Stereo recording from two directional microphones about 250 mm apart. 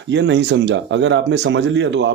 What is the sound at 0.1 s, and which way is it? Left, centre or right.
Speech, right.